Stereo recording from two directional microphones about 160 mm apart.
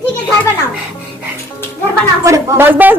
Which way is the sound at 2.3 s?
20° right (ahead or behind).